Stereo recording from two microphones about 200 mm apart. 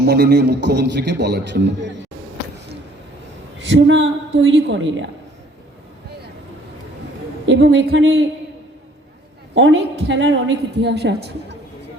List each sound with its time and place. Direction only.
0.0 s a man's voice: 55° right (ahead or behind)
3.6 s a woman's voice: 65° right (ahead or behind)
7.4 s a woman's voice: 65° right (ahead or behind)
9.6 s a woman's voice: 65° right (ahead or behind)